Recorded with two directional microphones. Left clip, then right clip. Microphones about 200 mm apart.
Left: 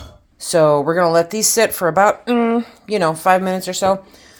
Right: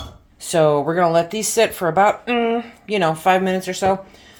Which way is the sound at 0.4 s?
40° left (ahead or behind).